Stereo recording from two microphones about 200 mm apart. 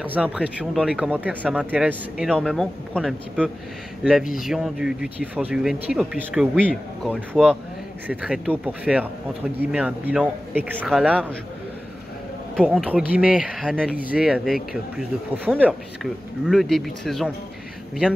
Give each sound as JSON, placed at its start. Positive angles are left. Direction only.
{"t": 0.0, "sound": "speech", "side_deg": -5}
{"t": 12.5, "sound": "speech", "side_deg": 5}